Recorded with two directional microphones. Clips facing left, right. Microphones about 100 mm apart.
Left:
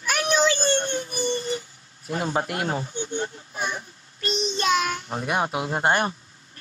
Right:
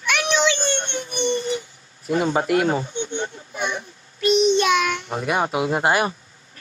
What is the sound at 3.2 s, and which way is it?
Child singing, 40° left (ahead or behind).